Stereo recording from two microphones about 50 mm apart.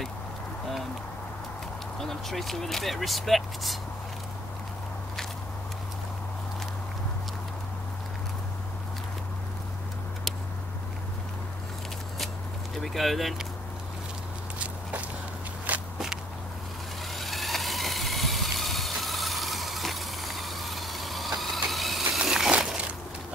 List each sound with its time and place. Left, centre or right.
2.0 s speech: centre
12.7 s speech: centre
14.6 s walk: right
17.1 s vehicle: centre
22.2 s a sound: centre